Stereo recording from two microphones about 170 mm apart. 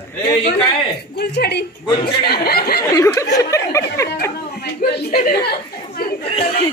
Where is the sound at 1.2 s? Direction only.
70° left (ahead or behind).